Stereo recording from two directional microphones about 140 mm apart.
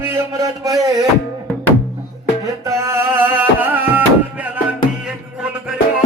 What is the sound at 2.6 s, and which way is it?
Music, 20° right (ahead or behind).